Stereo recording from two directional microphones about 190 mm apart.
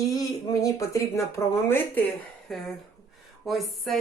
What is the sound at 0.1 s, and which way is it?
Speech, 15° left (ahead or behind).